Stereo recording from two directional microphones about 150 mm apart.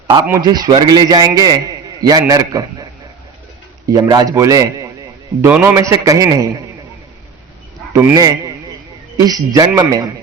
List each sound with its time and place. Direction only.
0.3 s a man's voice: 25° right (ahead or behind)
3.9 s a man's voice: 25° right (ahead or behind)
8.1 s a man's voice: 25° right (ahead or behind)